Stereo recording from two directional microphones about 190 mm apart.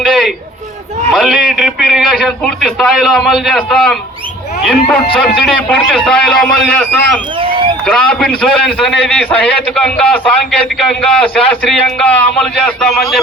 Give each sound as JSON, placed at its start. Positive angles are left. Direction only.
{"t": 0.0, "sound": "a sound", "side_deg": 0}
{"t": 1.1, "sound": "a man's voice", "side_deg": 0}
{"t": 7.3, "sound": "run", "side_deg": -25}
{"t": 7.9, "sound": "a man's voice", "side_deg": 5}